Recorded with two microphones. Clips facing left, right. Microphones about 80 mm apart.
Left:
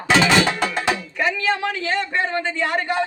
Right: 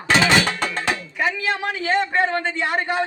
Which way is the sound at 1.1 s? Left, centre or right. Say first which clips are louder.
Left 1 dB; centre.